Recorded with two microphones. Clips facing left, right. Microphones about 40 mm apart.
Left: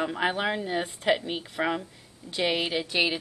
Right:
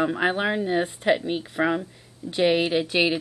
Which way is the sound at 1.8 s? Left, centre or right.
Centre.